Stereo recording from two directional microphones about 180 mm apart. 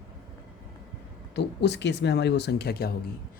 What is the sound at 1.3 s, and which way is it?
Speech, 70° left (ahead or behind).